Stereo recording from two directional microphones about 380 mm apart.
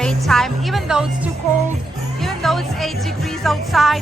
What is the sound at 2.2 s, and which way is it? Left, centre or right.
A woman's voice, centre.